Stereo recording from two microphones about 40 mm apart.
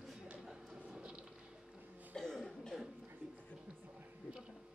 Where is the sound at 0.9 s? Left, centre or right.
Right.